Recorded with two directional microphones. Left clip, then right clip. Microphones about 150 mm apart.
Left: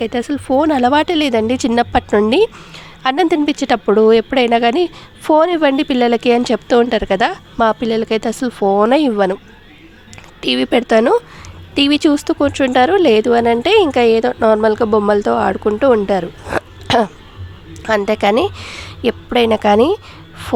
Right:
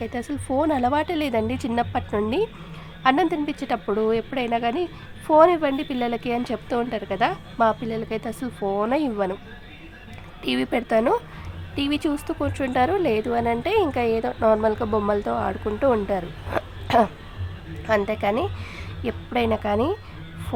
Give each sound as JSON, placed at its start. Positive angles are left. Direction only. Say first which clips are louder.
{"t": 0.0, "sound": "speech", "louder": "left 11 dB", "side_deg": 30}
{"t": 2.0, "sound": "speech", "louder": "left 12 dB", "side_deg": 40}
{"t": 2.3, "sound": "speech", "louder": "left 11 dB", "side_deg": 55}
{"t": 10.4, "sound": "speech", "louder": "left 10 dB", "side_deg": 45}